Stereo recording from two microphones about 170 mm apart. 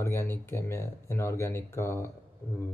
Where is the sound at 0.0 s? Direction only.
15° left (ahead or behind).